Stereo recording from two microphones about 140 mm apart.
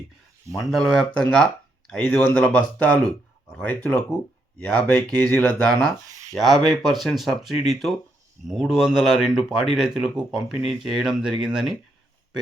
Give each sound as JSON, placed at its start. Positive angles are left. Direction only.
{"t": 0.6, "sound": "speech", "side_deg": 0}
{"t": 6.1, "sound": "speech", "side_deg": -25}
{"t": 6.3, "sound": "speech", "side_deg": 0}